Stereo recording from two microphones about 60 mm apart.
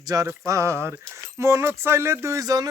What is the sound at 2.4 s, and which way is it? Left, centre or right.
Speech, right.